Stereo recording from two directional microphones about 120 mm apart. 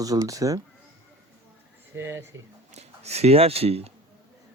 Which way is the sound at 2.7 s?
65° right (ahead or behind).